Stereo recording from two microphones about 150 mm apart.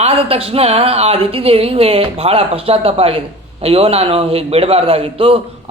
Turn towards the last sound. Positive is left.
turn(degrees=-40)  # may be behind; listen again after turning